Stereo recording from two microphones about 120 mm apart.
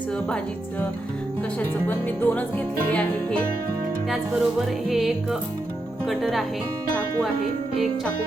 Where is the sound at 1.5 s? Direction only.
15° left (ahead or behind).